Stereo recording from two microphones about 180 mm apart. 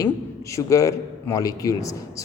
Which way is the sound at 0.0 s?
15° left (ahead or behind).